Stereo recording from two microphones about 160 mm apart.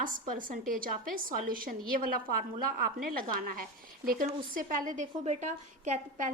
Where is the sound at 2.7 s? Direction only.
65° right (ahead or behind).